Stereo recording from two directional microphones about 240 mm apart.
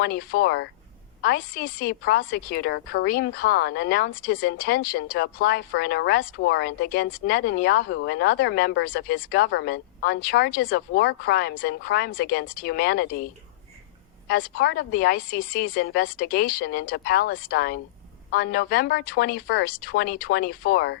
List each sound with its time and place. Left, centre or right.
0.0 s speech: left
14.3 s speech: left